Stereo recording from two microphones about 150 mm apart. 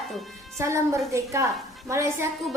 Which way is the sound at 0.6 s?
20° right (ahead or behind).